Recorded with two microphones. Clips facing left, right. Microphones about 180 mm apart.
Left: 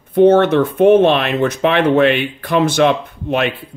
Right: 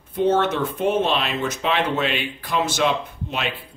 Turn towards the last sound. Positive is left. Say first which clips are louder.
# left 10 dB
turn(degrees=60)  # may be behind; listen again after turning